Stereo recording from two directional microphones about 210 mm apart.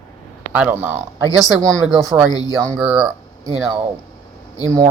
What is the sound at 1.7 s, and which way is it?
Speech, centre (ahead or behind).